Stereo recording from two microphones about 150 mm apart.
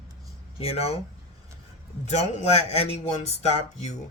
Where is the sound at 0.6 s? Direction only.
45° left (ahead or behind).